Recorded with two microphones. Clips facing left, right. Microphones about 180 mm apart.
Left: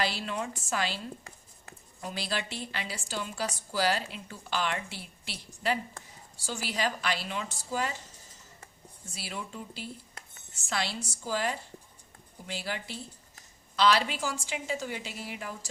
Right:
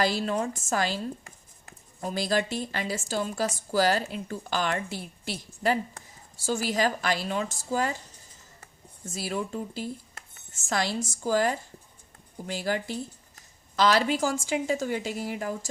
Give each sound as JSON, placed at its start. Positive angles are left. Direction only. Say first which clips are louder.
{"t": 0.0, "sound": "a woman's voice", "louder": "right 6 dB", "side_deg": -45}
{"t": 6.4, "sound": "a woman's voice", "louder": "right 6 dB", "side_deg": -45}
{"t": 9.0, "sound": "a woman's voice", "louder": "right 9 dB", "side_deg": -45}